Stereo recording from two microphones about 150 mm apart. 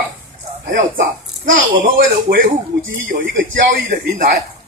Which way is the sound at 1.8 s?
65° right (ahead or behind).